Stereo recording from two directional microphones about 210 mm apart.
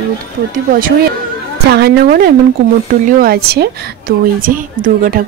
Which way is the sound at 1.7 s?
45° right (ahead or behind).